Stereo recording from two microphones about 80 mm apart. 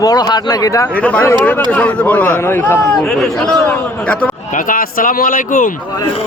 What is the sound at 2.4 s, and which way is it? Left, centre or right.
Speech, left.